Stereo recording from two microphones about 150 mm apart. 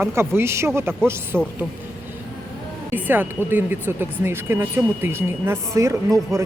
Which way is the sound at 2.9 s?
15° right (ahead or behind).